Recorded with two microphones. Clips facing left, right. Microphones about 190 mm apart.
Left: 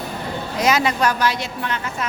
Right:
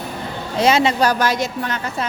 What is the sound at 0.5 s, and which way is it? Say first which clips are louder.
Speech: right 4 dB; 30° right (ahead or behind).